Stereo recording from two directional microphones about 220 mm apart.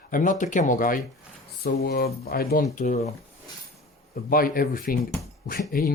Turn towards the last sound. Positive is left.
turn(degrees=40)  # may be behind; listen again after turning